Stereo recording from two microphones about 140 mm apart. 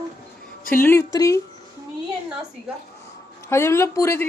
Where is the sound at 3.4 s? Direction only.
20° left (ahead or behind).